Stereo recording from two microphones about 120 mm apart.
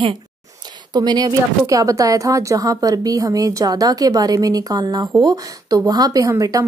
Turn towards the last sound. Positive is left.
turn(degrees=-30)  # may be behind; listen again after turning